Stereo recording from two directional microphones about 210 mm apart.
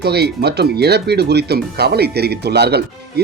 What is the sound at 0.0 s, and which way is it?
Speech, 50° right (ahead or behind).